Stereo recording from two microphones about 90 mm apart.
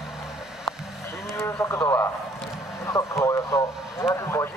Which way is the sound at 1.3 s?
30° left (ahead or behind).